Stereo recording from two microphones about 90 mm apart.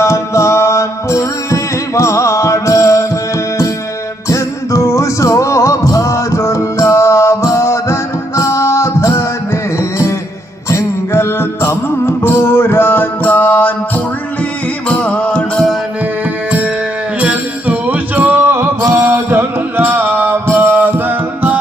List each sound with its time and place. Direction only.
0.0 s music: 35° left (ahead or behind)
4.3 s music: 35° left (ahead or behind)
10.7 s music: 30° left (ahead or behind)
14.8 s music: 15° left (ahead or behind)
16.5 s music: 15° right (ahead or behind)